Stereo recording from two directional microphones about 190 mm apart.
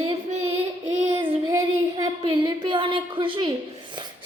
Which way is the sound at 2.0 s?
25° right (ahead or behind).